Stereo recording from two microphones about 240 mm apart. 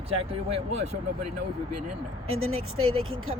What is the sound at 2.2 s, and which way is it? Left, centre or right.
Speech, right.